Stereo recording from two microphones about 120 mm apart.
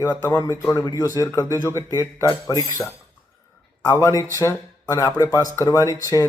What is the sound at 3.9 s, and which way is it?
Speech, 25° left (ahead or behind).